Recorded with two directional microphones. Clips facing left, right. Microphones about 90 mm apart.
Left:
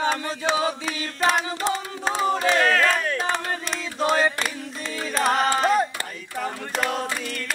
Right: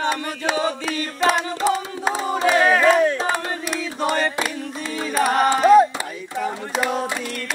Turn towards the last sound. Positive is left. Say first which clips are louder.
# right 3 dB
turn(degrees=-5)  # may be behind; listen again after turning